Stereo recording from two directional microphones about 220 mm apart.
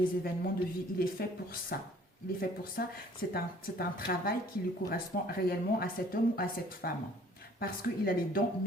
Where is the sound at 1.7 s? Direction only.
45° left (ahead or behind).